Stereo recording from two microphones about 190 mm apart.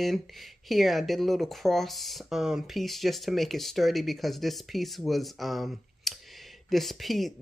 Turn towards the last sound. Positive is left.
turn(degrees=0)  # may be behind; listen again after turning